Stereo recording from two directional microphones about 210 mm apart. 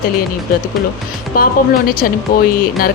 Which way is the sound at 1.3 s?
45° left (ahead or behind).